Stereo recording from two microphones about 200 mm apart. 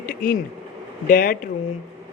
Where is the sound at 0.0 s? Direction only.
45° left (ahead or behind).